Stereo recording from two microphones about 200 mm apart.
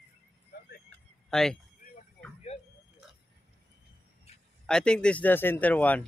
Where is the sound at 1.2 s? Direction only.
Centre (ahead or behind).